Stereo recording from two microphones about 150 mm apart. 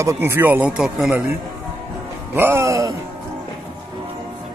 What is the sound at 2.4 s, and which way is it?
Music, 15° right (ahead or behind).